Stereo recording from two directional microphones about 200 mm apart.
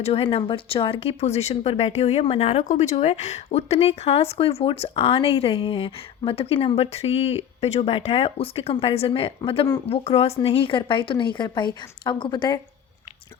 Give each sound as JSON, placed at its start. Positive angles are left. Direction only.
{"t": 0.0, "sound": "speech", "side_deg": 30}